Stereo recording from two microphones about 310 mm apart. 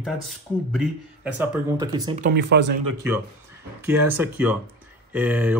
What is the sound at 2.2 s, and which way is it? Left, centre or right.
Speech, right.